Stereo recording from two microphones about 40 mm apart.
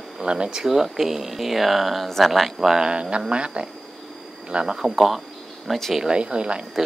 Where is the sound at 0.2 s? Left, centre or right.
Right.